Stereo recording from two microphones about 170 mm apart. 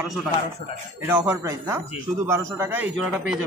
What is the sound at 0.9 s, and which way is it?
A man's voice, 15° right (ahead or behind).